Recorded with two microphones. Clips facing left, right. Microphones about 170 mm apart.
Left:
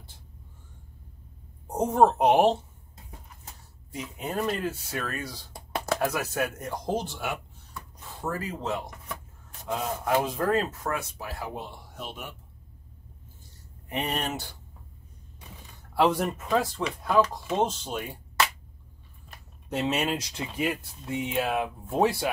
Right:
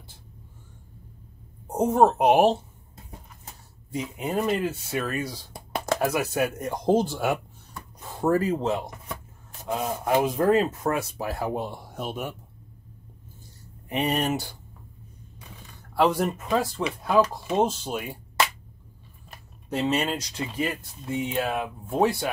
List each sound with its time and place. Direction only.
1.7 s speech: 5° right (ahead or behind)
4.2 s speech: 10° right (ahead or behind)
7.1 s speech: 45° right (ahead or behind)
9.7 s speech: 10° right (ahead or behind)
11.1 s speech: 45° right (ahead or behind)
13.9 s speech: 10° right (ahead or behind)
15.9 s speech: centre (ahead or behind)
19.7 s speech: centre (ahead or behind)